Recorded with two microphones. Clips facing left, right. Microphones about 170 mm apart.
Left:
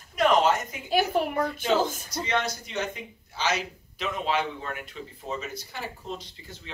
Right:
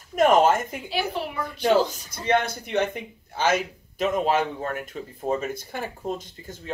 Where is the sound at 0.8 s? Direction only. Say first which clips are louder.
Left 8 dB; 50° left (ahead or behind).